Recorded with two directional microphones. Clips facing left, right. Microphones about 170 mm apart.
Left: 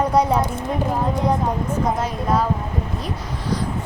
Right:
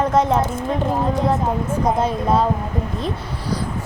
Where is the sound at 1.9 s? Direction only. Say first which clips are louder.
Right 3 dB; 25° right (ahead or behind).